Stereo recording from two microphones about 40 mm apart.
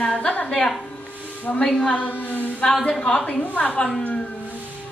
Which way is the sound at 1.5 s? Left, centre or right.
Left.